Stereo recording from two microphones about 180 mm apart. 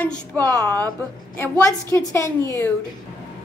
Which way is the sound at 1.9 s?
15° left (ahead or behind).